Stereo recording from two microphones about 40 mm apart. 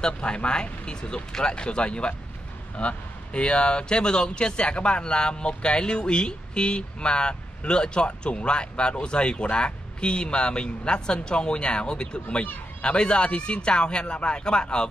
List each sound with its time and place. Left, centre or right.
0.0 s speech: left